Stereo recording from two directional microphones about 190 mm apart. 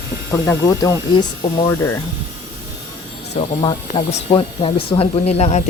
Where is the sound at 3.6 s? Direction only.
30° left (ahead or behind).